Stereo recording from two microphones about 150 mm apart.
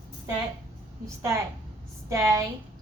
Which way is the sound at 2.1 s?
20° right (ahead or behind).